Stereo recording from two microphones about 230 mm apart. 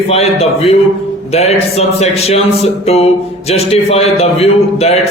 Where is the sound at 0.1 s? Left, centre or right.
Left.